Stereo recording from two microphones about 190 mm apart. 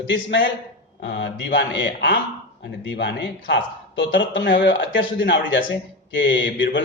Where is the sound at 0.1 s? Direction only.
75° left (ahead or behind).